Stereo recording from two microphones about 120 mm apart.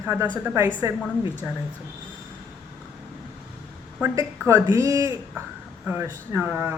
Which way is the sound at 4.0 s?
20° right (ahead or behind).